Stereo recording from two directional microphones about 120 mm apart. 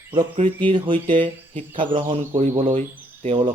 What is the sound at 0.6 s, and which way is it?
Speech, 45° right (ahead or behind).